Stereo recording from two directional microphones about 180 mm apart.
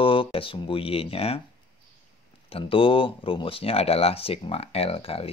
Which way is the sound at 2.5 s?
30° left (ahead or behind).